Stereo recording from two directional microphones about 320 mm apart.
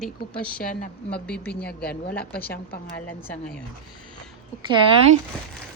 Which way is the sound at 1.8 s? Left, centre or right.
Left.